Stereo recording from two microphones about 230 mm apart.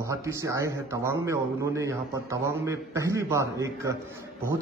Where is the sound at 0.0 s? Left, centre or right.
Centre.